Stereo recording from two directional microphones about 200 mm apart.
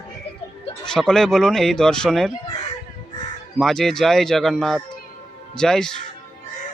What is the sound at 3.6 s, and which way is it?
Speech, centre (ahead or behind).